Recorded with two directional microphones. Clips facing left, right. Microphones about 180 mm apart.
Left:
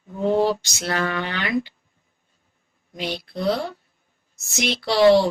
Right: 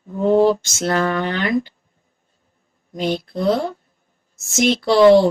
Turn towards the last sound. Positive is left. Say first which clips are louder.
# right 4 dB
turn(degrees=-50)  # may be behind; listen again after turning